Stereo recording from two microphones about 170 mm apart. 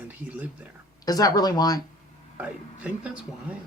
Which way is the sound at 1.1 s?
25° left (ahead or behind).